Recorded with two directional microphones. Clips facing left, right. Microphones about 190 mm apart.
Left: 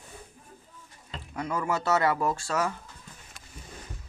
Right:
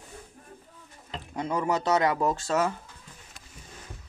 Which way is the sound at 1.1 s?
20° right (ahead or behind).